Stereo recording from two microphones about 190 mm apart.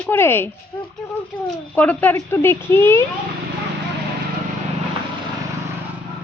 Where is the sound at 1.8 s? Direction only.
10° left (ahead or behind).